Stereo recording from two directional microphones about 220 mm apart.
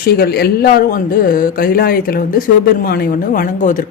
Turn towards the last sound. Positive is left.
turn(degrees=40)  # may be behind; listen again after turning